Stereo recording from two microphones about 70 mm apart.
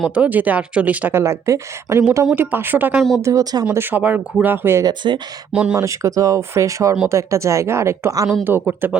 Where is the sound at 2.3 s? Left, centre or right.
Right.